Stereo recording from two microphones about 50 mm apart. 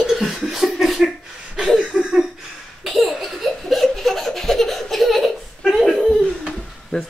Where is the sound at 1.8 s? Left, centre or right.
Right.